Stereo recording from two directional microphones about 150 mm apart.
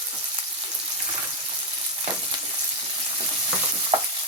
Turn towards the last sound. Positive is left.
turn(degrees=-40)  # may be behind; listen again after turning